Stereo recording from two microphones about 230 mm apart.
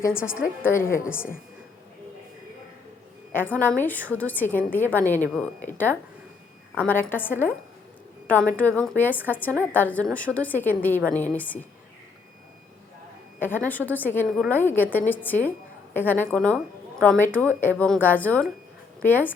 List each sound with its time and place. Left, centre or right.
0.2 s a woman's voice: centre
0.6 s a woman's voice: centre
3.3 s a woman's voice: centre
13.7 s a woman's voice: centre